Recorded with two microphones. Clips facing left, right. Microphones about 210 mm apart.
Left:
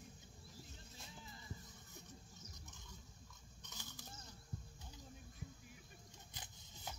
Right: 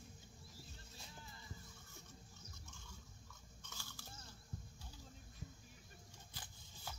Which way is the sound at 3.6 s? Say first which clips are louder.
Left 2 dB; 20° left (ahead or behind).